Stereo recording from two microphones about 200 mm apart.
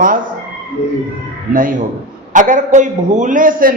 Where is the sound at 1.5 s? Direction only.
45° right (ahead or behind).